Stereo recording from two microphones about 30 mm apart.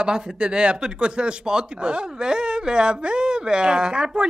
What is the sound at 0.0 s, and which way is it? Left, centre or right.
A man's voice, right.